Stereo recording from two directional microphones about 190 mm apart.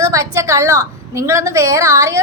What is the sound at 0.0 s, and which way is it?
A woman's voice, 15° right (ahead or behind).